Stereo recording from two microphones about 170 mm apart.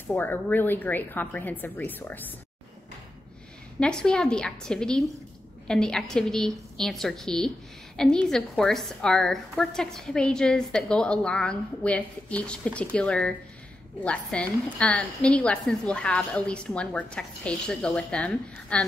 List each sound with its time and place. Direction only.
0.0 s a woman's voice: 10° left (ahead or behind)
3.8 s a woman's voice: 5° left (ahead or behind)